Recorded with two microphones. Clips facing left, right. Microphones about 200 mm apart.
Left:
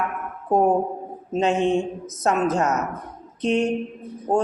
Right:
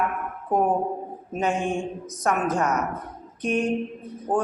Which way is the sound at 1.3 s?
25° left (ahead or behind).